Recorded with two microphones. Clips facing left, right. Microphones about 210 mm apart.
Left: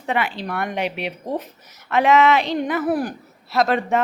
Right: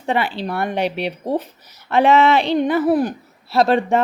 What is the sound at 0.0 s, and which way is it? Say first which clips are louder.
A woman's voice: right 3 dB; 30° right (ahead or behind).